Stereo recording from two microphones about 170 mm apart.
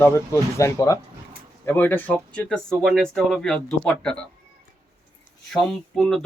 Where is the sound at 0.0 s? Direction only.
15° left (ahead or behind).